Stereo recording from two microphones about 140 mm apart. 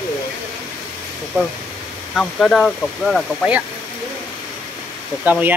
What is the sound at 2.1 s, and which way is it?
Speech, 5° left (ahead or behind).